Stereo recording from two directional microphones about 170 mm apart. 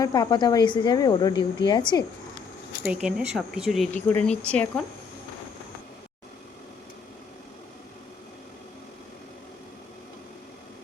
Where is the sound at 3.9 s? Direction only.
10° left (ahead or behind).